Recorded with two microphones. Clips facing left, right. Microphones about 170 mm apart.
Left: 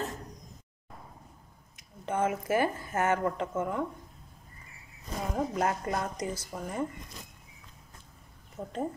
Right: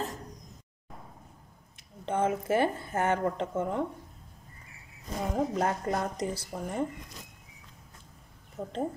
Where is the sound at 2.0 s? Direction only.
30° right (ahead or behind).